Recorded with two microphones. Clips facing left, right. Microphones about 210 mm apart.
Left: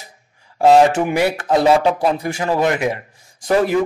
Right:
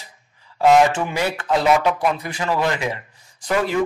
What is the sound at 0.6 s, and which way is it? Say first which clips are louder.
Speech: left 3 dB; 35° left (ahead or behind).